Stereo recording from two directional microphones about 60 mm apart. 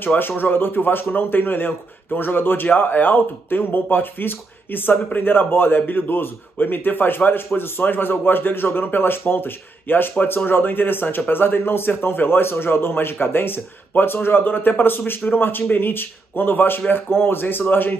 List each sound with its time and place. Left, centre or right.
0.0 s speech: left